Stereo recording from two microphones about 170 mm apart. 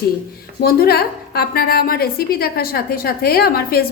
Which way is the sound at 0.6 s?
65° left (ahead or behind).